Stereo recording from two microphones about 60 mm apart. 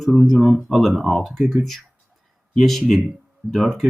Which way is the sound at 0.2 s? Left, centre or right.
Centre.